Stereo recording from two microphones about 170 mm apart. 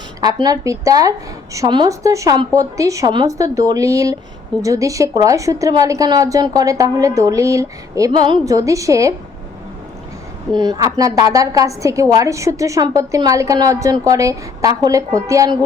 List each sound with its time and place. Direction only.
0.2 s a woman's voice: 20° right (ahead or behind)
10.5 s a woman's voice: 25° right (ahead or behind)